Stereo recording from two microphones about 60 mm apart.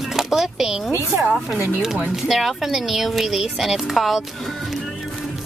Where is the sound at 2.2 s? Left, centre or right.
Centre.